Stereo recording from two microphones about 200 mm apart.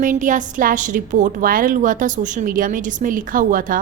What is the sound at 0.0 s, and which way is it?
A woman's voice, 40° right (ahead or behind).